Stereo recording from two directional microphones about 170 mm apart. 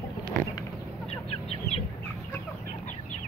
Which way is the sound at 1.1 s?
35° left (ahead or behind).